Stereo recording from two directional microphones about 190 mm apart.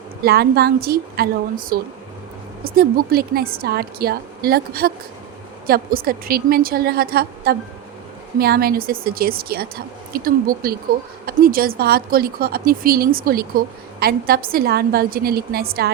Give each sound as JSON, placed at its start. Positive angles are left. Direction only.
{"t": 0.2, "sound": "speech", "side_deg": -55}